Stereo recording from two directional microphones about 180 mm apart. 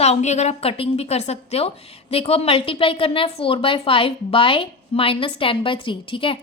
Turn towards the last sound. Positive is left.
turn(degrees=30)  # may be behind; listen again after turning